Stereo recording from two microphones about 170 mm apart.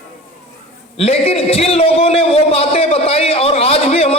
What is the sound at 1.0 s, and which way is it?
A man's voice, 35° left (ahead or behind).